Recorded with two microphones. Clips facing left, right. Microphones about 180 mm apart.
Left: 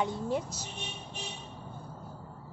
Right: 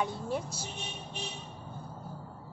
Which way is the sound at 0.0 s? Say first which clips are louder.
Left 2 dB; 20° left (ahead or behind).